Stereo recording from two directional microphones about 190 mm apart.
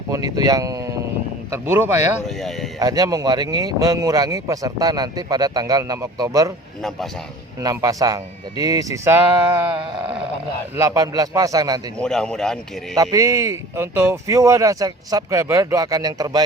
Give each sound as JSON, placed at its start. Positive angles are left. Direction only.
{"t": 0.1, "sound": "speech", "side_deg": -20}
{"t": 2.2, "sound": "speech", "side_deg": 0}
{"t": 2.7, "sound": "speech", "side_deg": -20}
{"t": 7.6, "sound": "speech", "side_deg": -20}
{"t": 10.8, "sound": "speech", "side_deg": -20}
{"t": 11.9, "sound": "speech", "side_deg": 5}
{"t": 13.0, "sound": "speech", "side_deg": -15}